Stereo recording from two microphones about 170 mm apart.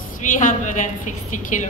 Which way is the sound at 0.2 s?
50° left (ahead or behind).